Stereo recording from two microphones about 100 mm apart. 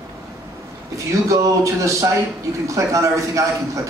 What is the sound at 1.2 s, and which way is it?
A man's voice, 30° right (ahead or behind).